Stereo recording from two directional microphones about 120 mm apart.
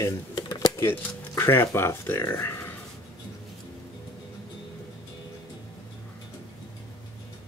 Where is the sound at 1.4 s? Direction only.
20° left (ahead or behind).